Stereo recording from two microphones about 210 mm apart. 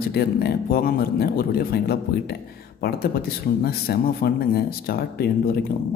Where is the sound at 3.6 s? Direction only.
45° left (ahead or behind).